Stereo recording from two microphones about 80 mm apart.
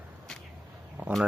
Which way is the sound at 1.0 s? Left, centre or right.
Right.